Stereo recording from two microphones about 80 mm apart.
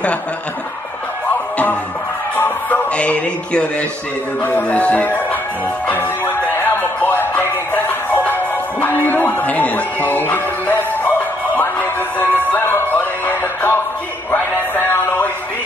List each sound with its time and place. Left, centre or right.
2.3 s music: left
4.4 s speech: left
5.9 s music: left